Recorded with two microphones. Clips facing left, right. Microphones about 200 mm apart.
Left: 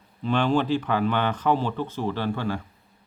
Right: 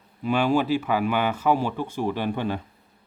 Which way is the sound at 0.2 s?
10° right (ahead or behind).